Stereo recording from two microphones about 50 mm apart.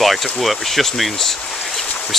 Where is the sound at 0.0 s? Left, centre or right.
Centre.